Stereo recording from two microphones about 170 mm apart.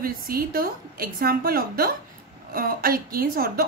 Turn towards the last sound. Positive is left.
turn(degrees=-60)  # may be behind; listen again after turning